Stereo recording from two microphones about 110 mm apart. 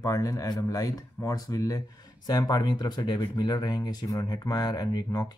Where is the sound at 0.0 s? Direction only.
30° left (ahead or behind).